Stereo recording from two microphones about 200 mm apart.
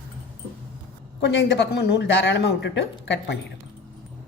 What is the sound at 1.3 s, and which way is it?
Speech, 60° left (ahead or behind).